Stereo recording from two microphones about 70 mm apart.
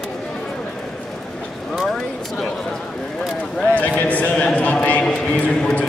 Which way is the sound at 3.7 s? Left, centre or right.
Left.